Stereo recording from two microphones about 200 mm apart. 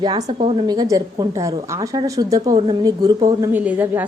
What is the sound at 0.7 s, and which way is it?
A woman's voice, 20° right (ahead or behind).